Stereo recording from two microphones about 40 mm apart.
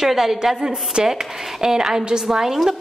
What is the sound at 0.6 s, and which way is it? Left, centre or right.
A woman's voice, right.